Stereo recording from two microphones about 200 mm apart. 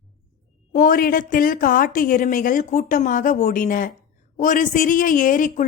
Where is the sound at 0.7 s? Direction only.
45° left (ahead or behind).